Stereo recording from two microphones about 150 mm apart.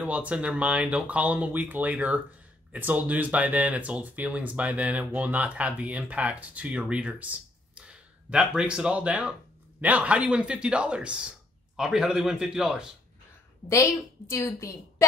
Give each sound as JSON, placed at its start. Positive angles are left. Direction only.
{"t": 0.0, "sound": "speech", "side_deg": -10}
{"t": 14.3, "sound": "a woman's voice", "side_deg": 20}